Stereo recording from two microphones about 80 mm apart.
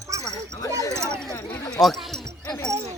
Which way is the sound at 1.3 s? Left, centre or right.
Left.